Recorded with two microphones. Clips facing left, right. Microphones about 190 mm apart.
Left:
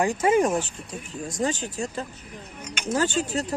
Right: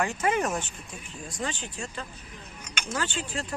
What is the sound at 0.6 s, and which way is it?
Speech, 40° left (ahead or behind).